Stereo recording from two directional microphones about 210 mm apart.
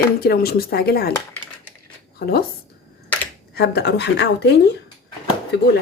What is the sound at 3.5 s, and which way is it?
Speech, 50° left (ahead or behind).